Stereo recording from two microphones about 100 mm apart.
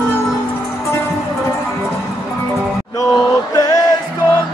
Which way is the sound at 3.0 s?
40° left (ahead or behind).